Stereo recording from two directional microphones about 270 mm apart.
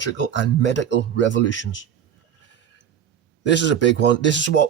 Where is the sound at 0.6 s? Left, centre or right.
Left.